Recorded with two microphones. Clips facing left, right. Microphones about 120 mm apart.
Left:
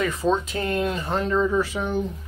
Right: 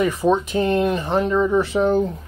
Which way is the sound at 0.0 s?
15° right (ahead or behind).